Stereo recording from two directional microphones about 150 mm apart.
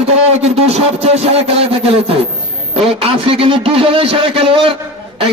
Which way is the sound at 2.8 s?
40° right (ahead or behind).